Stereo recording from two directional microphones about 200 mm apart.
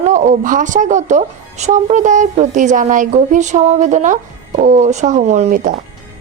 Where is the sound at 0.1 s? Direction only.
40° right (ahead or behind).